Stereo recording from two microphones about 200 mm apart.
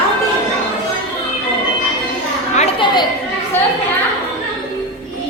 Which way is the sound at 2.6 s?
25° left (ahead or behind).